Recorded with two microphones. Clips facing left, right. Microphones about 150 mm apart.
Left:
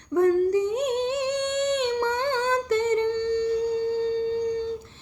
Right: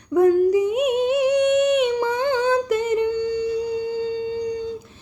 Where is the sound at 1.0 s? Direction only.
30° left (ahead or behind).